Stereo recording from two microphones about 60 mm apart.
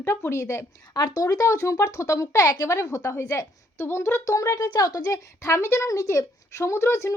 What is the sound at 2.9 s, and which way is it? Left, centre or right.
A woman's voice, left.